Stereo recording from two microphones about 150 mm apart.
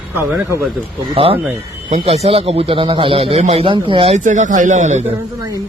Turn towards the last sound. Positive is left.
turn(degrees=-50)  # may be behind; listen again after turning